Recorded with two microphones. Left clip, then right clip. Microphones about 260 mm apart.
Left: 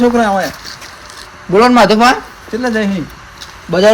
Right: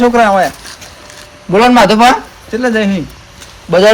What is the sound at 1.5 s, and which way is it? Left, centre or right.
Speech, right.